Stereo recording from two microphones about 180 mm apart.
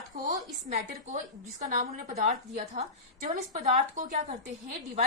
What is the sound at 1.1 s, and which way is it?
A woman's voice, 45° right (ahead or behind).